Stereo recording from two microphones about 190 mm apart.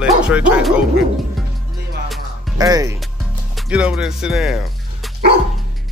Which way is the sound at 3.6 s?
5° right (ahead or behind).